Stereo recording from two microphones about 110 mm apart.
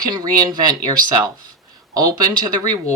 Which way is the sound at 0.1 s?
35° right (ahead or behind).